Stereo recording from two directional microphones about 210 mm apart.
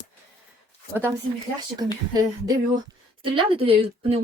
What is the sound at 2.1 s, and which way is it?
Speech, 20° right (ahead or behind).